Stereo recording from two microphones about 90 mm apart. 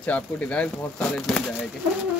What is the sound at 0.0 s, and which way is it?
Speech, 15° left (ahead or behind).